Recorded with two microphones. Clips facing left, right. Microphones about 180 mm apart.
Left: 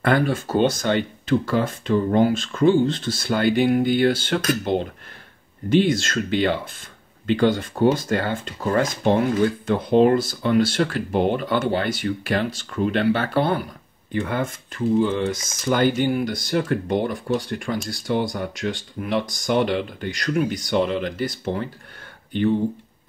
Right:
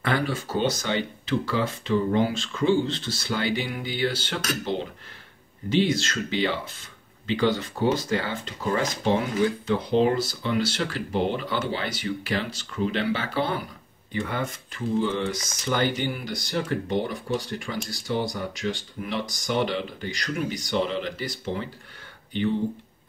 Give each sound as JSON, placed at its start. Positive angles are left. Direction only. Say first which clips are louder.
{"t": 0.0, "sound": "speech", "louder": "left 6 dB", "side_deg": 50}